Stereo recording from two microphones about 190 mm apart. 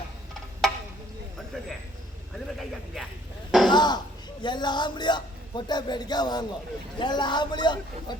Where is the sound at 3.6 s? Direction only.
25° left (ahead or behind).